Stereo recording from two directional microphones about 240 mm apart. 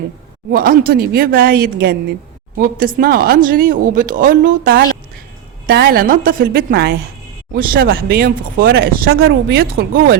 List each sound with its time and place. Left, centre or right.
0.5 s speech: right